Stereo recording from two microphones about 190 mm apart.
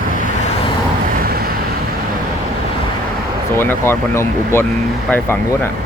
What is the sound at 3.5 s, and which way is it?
Speech, 10° left (ahead or behind).